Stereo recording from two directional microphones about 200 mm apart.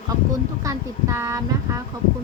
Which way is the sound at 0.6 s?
15° right (ahead or behind).